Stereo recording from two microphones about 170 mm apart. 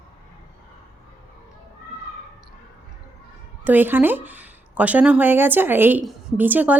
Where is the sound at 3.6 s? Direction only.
10° right (ahead or behind).